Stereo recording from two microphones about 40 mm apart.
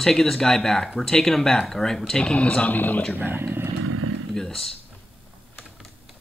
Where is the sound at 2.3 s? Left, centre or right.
Left.